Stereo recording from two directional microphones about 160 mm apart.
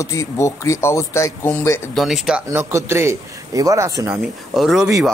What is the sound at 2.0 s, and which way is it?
Speech, centre (ahead or behind).